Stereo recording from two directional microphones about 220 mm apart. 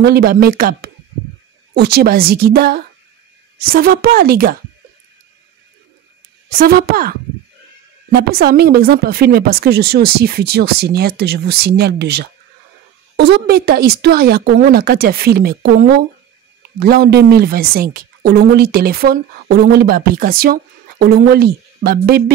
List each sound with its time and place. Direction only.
0.0 s speech: 45° right (ahead or behind)
6.6 s speech: 45° right (ahead or behind)
8.4 s speech: 45° right (ahead or behind)